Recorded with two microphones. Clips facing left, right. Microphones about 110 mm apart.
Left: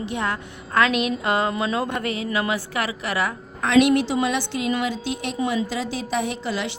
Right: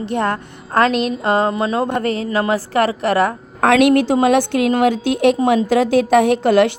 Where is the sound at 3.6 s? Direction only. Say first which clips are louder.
Right 5 dB; 55° right (ahead or behind).